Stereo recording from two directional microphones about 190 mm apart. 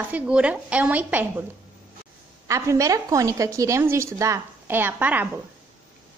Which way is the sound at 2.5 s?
15° right (ahead or behind).